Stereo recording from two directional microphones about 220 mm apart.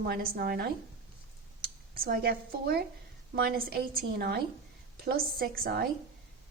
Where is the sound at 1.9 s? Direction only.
40° right (ahead or behind).